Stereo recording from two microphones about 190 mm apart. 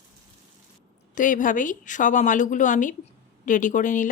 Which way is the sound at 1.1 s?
45° left (ahead or behind).